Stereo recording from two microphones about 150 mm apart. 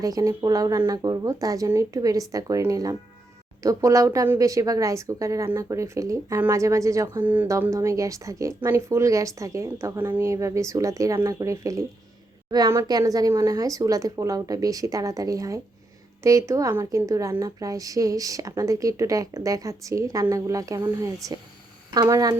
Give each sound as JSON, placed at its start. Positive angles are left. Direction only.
{"t": 0.0, "sound": "speech", "side_deg": -25}